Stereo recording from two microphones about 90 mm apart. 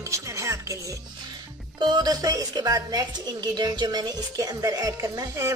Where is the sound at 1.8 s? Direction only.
50° right (ahead or behind).